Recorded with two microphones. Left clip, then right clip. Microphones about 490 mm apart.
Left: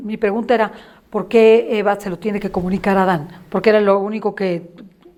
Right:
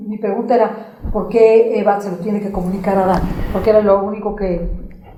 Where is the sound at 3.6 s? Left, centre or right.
Left.